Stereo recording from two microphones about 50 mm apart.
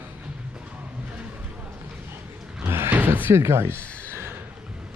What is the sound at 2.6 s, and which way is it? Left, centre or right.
Music, right.